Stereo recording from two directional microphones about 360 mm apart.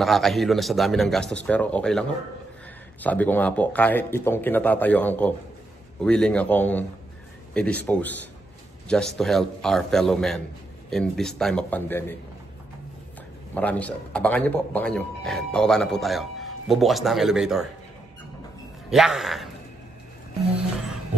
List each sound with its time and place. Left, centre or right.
0.0 s a man's voice: centre
13.6 s a man's voice: centre
18.9 s a man's voice: centre